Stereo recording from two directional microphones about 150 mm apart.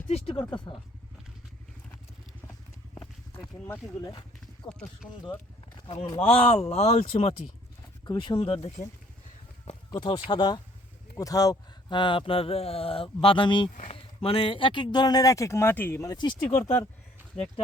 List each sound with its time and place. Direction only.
0.5 s speech: 30° left (ahead or behind)
2.5 s horse: 10° left (ahead or behind)
5.9 s speech: 40° left (ahead or behind)
8.0 s speech: 30° left (ahead or behind)
9.9 s speech: 35° left (ahead or behind)